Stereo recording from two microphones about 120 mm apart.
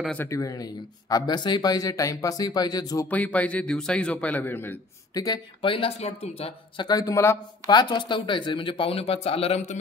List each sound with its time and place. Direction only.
0.2 s speech: 25° left (ahead or behind)
3.1 s a man's voice: 10° left (ahead or behind)
5.1 s speech: 30° left (ahead or behind)
5.6 s speech: 45° left (ahead or behind)
6.8 s a man's voice: 30° left (ahead or behind)
7.6 s speech: 40° left (ahead or behind); by 9.6 s 55° left (ahead or behind)